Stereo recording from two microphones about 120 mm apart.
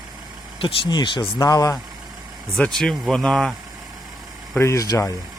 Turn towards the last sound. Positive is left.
turn(degrees=25)  # may be behind; listen again after turning